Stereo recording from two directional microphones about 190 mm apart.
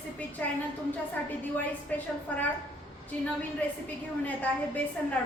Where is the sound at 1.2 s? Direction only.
10° left (ahead or behind).